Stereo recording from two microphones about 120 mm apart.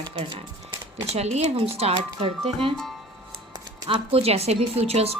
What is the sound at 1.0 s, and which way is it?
Speech, 65° right (ahead or behind).